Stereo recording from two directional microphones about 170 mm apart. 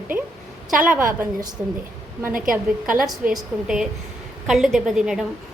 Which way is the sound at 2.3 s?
55° right (ahead or behind).